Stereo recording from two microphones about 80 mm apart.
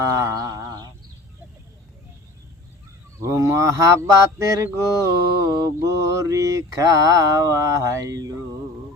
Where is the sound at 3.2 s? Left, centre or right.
Right.